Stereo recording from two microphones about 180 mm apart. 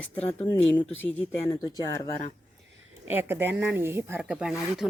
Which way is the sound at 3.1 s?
10° right (ahead or behind).